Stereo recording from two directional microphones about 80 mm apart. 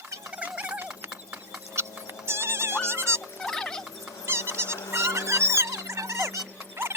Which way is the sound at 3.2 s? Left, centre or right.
Centre.